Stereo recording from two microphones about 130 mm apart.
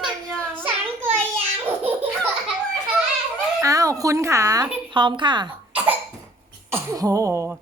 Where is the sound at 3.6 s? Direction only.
25° right (ahead or behind).